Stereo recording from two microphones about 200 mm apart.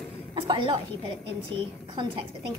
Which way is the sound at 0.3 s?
25° right (ahead or behind).